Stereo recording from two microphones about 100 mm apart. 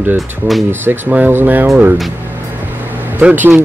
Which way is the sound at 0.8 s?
20° right (ahead or behind).